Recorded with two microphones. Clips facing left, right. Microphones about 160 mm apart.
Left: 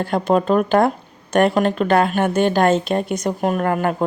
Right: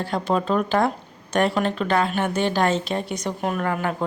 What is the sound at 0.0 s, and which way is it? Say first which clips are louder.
Speech: left 5 dB; 50° left (ahead or behind).